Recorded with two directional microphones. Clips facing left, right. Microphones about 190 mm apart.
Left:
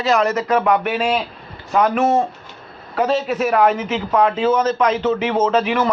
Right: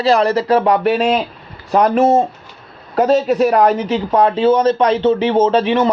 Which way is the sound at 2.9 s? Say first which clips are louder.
Right 6 dB; 40° right (ahead or behind).